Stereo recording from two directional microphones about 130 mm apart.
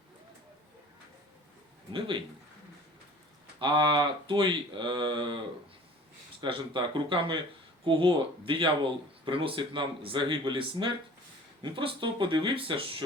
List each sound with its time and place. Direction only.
1.9 s speech: 40° right (ahead or behind)
3.6 s speech: 35° right (ahead or behind)
6.4 s speech: 35° right (ahead or behind)